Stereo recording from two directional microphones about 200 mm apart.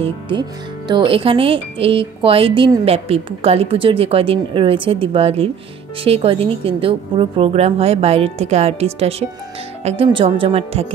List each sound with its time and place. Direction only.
0.0 s speech: 25° right (ahead or behind)